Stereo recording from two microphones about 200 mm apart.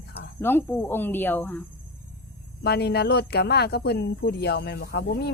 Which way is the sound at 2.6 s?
55° left (ahead or behind).